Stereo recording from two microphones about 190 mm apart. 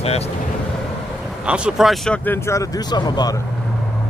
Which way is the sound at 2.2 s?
10° left (ahead or behind).